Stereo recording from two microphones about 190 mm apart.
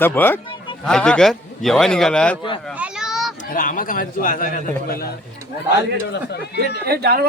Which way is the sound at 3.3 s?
45° left (ahead or behind).